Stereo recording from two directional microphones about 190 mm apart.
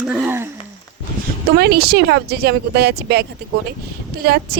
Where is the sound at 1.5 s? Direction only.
55° right (ahead or behind).